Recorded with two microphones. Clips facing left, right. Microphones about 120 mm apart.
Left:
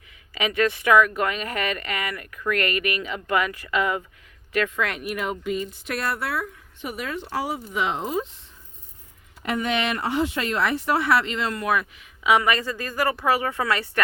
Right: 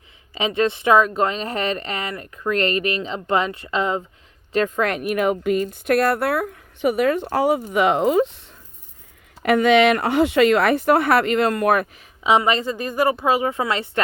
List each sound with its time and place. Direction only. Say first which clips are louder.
0.3 s speech: right 3 dB; 25° right (ahead or behind)
4.5 s speech: right 5 dB; 40° right (ahead or behind); by 8.4 s 75° right (ahead or behind)
9.4 s speech: right 10 dB; 80° right; by 12.0 s 50° right (ahead or behind)
12.2 s speech: right 3 dB; 25° right (ahead or behind)